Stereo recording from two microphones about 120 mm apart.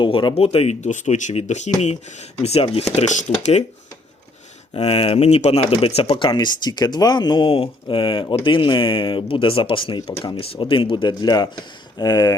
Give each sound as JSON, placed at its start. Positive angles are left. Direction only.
{"t": 0.0, "sound": "speech", "side_deg": 40}
{"t": 4.7, "sound": "speech", "side_deg": 55}